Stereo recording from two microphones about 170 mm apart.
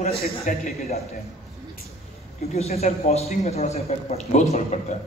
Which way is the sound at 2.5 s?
40° left (ahead or behind).